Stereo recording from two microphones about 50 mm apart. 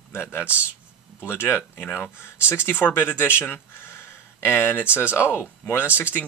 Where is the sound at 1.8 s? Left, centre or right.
Left.